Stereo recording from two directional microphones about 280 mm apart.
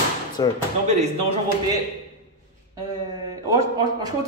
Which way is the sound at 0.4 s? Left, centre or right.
Centre.